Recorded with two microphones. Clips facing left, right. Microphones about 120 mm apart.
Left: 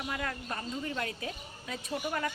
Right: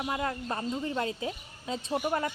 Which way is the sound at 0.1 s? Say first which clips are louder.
Right 5 dB; 25° right (ahead or behind).